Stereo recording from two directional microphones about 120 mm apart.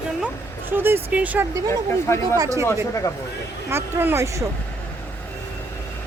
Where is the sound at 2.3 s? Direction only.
30° right (ahead or behind).